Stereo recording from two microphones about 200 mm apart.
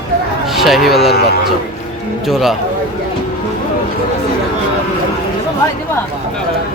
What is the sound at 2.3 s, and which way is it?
Speech, centre (ahead or behind).